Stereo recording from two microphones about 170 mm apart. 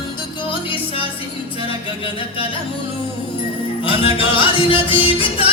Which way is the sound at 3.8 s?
30° left (ahead or behind).